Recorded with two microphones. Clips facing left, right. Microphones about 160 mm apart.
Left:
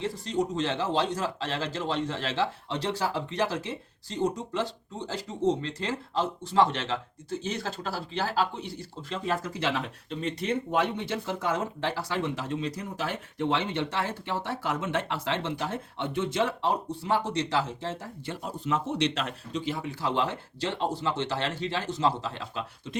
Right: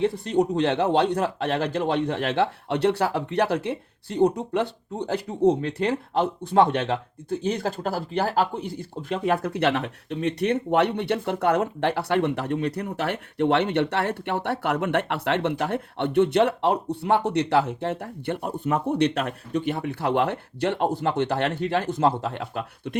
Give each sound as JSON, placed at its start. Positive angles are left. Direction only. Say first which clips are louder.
{"t": 0.0, "sound": "speech", "louder": "right 7 dB", "side_deg": -60}